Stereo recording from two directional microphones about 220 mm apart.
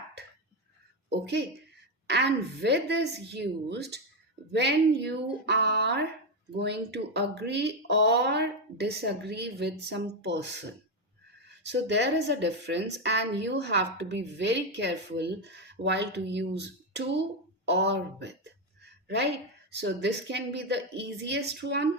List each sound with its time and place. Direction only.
1.1 s a woman's voice: 50° right (ahead or behind)
11.7 s a woman's voice: 50° right (ahead or behind)
17.7 s a sound: 50° right (ahead or behind)
19.7 s a woman's voice: 50° right (ahead or behind)